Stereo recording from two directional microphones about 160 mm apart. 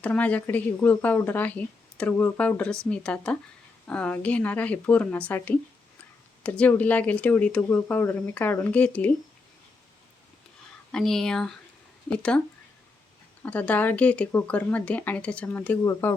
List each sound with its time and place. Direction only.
0.0 s speech: 10° left (ahead or behind)
10.9 s speech: 5° left (ahead or behind)
13.4 s speech: 10° left (ahead or behind)